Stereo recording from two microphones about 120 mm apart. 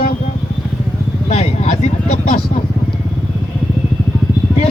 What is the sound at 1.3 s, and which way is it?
Speech, 70° left (ahead or behind).